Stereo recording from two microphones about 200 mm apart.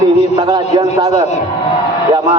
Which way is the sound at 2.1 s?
20° right (ahead or behind).